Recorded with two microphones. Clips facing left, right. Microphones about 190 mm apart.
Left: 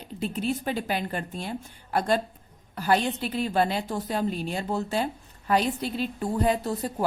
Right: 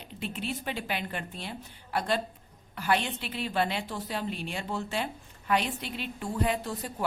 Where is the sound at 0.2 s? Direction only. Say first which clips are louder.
Left 7 dB; 40° left (ahead or behind).